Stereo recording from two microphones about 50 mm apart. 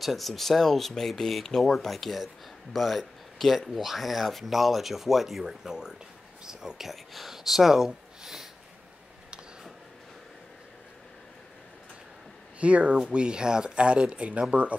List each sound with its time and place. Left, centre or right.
0.0 s speech: centre
12.5 s speech: right